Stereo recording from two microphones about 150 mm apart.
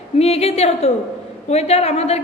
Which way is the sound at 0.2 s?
40° left (ahead or behind).